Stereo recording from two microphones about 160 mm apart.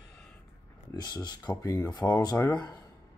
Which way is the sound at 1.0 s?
25° left (ahead or behind).